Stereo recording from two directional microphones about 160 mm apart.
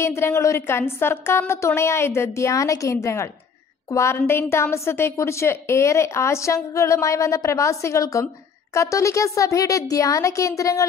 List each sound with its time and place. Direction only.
0.0 s a woman's voice: 15° left (ahead or behind)